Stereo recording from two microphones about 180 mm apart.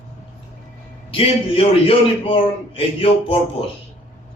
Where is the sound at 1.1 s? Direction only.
30° left (ahead or behind).